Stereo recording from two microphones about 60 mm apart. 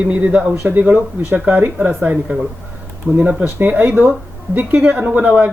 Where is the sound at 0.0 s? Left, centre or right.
Right.